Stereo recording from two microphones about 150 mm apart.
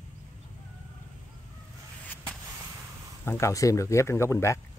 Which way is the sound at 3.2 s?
15° left (ahead or behind).